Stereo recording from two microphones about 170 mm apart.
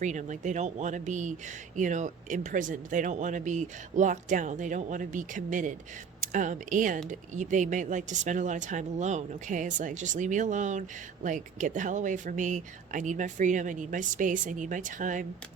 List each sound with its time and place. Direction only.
0.0 s speech: 45° right (ahead or behind)